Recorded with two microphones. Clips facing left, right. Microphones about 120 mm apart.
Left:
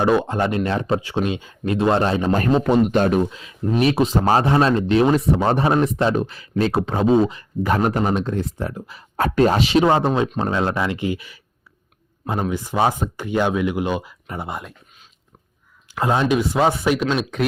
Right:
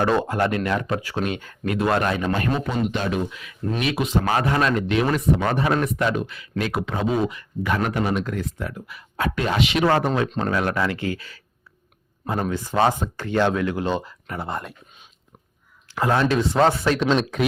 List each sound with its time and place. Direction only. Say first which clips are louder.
0.0 s speech: left 2 dB; 15° left (ahead or behind)
2.6 s speech: left 8 dB; 50° left (ahead or behind)
3.2 s speech: left 3 dB; 30° left (ahead or behind)
9.8 s speech: left 3 dB; 20° left (ahead or behind)
10.2 s speech: left 2 dB; 10° left (ahead or behind)
10.5 s speech: left 1 dB; 25° left (ahead or behind)
15.9 s speech: left 1 dB; 20° left (ahead or behind)
17.3 s speech: left 1 dB; centre (ahead or behind)